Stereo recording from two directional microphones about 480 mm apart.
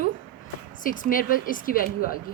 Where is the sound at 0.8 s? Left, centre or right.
Centre.